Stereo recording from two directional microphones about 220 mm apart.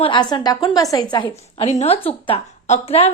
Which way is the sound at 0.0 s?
20° left (ahead or behind).